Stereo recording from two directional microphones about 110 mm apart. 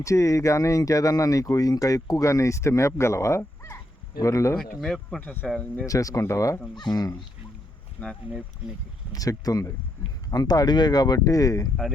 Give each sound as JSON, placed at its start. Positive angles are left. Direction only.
{"t": 0.0, "sound": "speech", "side_deg": 30}
{"t": 4.5, "sound": "speech", "side_deg": 5}
{"t": 5.2, "sound": "speech", "side_deg": 15}
{"t": 5.8, "sound": "speech", "side_deg": 30}
{"t": 8.0, "sound": "speech", "side_deg": 15}
{"t": 9.1, "sound": "speech", "side_deg": 35}